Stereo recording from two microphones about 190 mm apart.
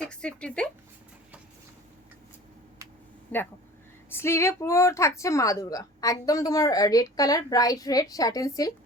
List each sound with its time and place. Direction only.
0.0 s speech: 5° left (ahead or behind)
3.3 s a woman's voice: 10° left (ahead or behind)